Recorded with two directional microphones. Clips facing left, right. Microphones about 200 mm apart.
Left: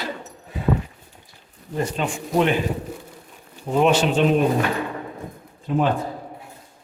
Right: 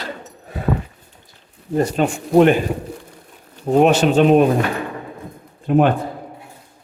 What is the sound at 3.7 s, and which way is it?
Speech, 45° right (ahead or behind).